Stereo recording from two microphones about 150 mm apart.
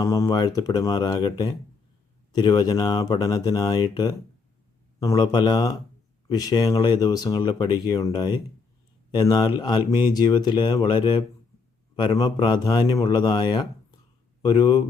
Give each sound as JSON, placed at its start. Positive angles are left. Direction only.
{"t": 0.0, "sound": "speech", "side_deg": 20}